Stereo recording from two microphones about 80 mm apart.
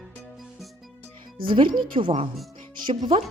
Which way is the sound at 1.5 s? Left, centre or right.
Right.